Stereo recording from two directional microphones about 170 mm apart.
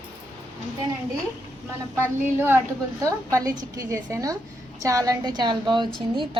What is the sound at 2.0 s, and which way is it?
A woman's voice, 10° right (ahead or behind).